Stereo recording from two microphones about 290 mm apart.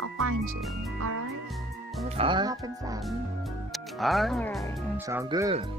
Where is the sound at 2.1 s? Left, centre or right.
Centre.